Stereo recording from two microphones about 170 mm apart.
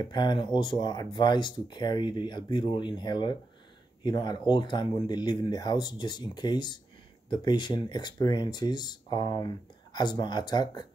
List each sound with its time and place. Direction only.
0.0 s speech: 25° left (ahead or behind)